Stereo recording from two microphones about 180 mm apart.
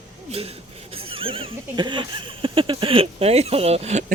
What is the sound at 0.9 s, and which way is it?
Horse, 30° right (ahead or behind).